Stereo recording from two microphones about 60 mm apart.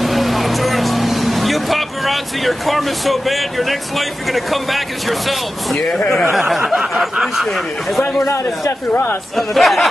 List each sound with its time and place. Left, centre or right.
0.0 s vehicle: centre
4.3 s speech: centre
8.2 s a man's voice: left
9.5 s speech: centre